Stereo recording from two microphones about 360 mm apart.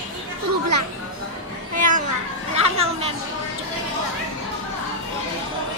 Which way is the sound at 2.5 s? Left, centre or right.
Centre.